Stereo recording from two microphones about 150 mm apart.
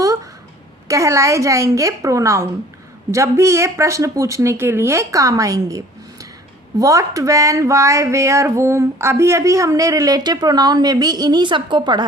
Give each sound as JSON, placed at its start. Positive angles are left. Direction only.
{"t": 0.9, "sound": "speech", "side_deg": -20}